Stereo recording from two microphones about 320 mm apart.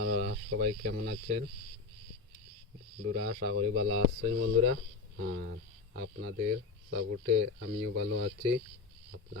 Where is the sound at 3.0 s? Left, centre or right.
Right.